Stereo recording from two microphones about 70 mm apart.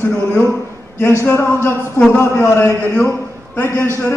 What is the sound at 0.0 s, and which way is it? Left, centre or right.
A man's voice, left.